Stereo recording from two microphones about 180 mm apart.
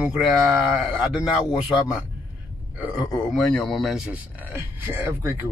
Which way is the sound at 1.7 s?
Centre (ahead or behind).